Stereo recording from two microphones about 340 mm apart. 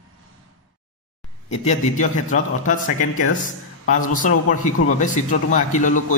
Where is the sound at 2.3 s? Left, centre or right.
Left.